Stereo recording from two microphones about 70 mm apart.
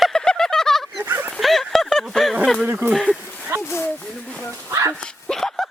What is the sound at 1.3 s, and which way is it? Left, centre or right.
Speech, centre.